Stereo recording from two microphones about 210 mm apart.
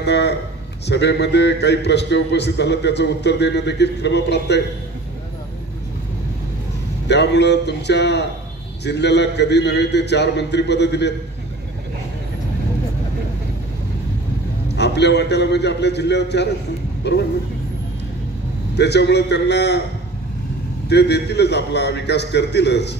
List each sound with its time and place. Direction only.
0.0 s a sound: 55° left (ahead or behind)
0.8 s a man's voice: 55° left (ahead or behind)
7.1 s a man's voice: 55° left (ahead or behind)
14.8 s a man's voice: 55° left (ahead or behind)
18.8 s a man's voice: 55° left (ahead or behind)
20.9 s a man's voice: 55° left (ahead or behind)